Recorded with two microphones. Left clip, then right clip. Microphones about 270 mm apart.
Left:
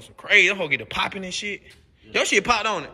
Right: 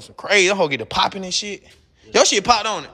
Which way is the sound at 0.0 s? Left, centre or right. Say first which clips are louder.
Right 1 dB; centre.